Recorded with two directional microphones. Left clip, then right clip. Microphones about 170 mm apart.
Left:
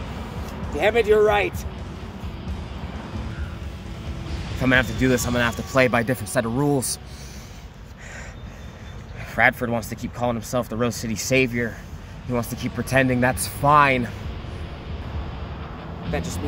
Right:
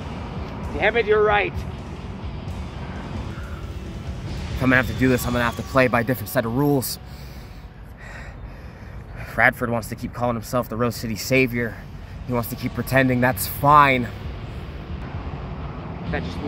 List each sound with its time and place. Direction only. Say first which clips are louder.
0.7 s speech: left 1 dB; 45° left (ahead or behind)
4.3 s speech: right 1 dB; centre (ahead or behind)
9.3 s speech: right 1 dB; centre (ahead or behind)
16.1 s speech: even; 50° left (ahead or behind)